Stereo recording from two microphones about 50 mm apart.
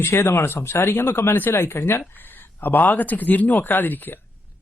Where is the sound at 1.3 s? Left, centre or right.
Left.